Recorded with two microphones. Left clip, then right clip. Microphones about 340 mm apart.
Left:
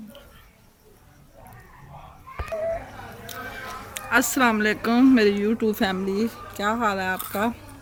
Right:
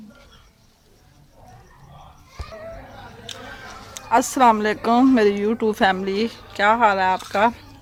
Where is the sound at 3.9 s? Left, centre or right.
Centre.